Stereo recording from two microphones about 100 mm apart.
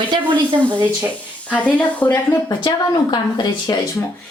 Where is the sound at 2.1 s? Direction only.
40° left (ahead or behind).